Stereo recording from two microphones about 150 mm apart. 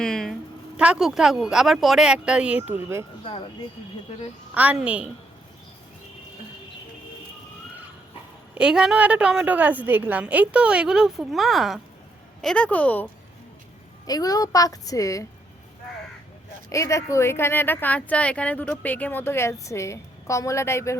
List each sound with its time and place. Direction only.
0.0 s a sound: 5° left (ahead or behind)
0.8 s speech: 5° right (ahead or behind)
4.5 s a woman's voice: 10° right (ahead or behind)
8.5 s a woman's voice: 5° right (ahead or behind); by 13.1 s 10° left (ahead or behind)
14.1 s a woman's voice: 25° left (ahead or behind)
16.6 s a woman's voice: 20° left (ahead or behind)